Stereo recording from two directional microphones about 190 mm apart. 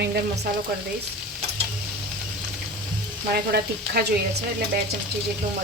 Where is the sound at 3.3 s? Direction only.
55° right (ahead or behind).